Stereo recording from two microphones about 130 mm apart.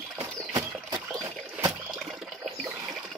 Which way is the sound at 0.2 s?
30° right (ahead or behind).